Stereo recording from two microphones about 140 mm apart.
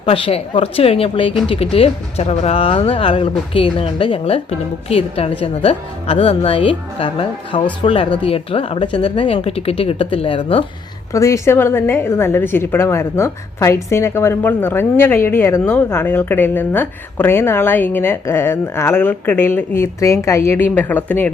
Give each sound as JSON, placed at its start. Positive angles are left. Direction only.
{"t": 0.0, "sound": "speech", "side_deg": 45}
{"t": 11.1, "sound": "a woman's voice", "side_deg": 20}